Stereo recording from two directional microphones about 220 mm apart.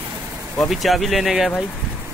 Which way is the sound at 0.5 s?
Centre (ahead or behind).